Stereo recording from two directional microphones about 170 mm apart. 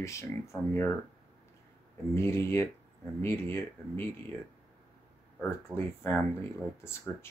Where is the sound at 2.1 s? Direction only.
15° left (ahead or behind).